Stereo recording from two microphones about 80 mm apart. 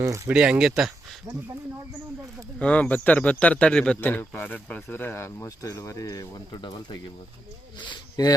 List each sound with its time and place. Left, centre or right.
0.3 s speech: centre
2.6 s speech: centre
4.0 s speech: left
8.2 s speech: left